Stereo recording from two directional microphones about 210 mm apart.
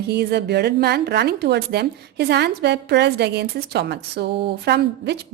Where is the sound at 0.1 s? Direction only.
50° right (ahead or behind).